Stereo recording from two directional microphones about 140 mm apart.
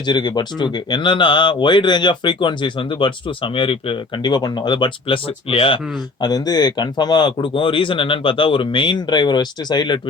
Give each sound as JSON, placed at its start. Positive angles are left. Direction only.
{"t": 0.0, "sound": "speech", "side_deg": 35}
{"t": 6.2, "sound": "speech", "side_deg": 30}